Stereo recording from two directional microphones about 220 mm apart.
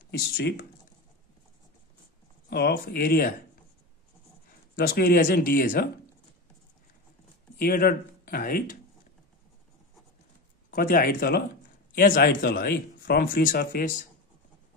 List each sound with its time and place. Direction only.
0.0 s speech: 50° left (ahead or behind)
2.5 s speech: 45° left (ahead or behind)
4.7 s speech: 45° left (ahead or behind)
7.5 s speech: 45° left (ahead or behind)
10.7 s speech: 40° left (ahead or behind)